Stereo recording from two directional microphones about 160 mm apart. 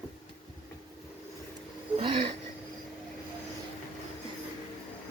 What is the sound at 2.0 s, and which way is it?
Speech, 30° right (ahead or behind).